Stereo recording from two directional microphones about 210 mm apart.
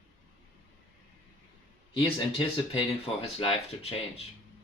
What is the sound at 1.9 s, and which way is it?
Speech, 25° left (ahead or behind).